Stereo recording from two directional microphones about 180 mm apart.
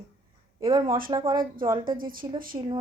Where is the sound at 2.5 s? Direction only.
25° right (ahead or behind).